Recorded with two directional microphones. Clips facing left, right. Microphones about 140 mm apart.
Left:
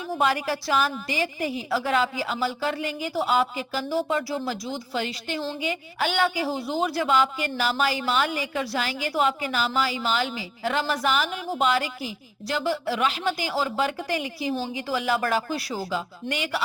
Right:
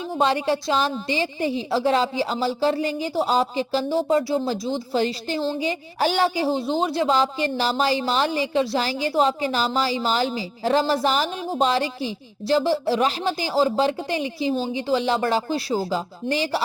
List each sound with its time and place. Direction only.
0.1 s a woman's voice: 25° right (ahead or behind)